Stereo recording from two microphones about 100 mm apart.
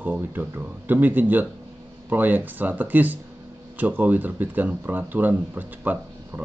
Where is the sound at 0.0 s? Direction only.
20° right (ahead or behind).